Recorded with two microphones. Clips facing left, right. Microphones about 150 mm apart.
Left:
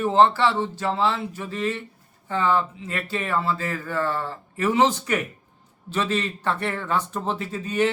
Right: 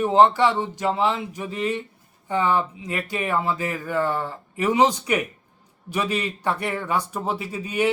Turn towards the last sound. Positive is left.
turn(degrees=-10)  # may be behind; listen again after turning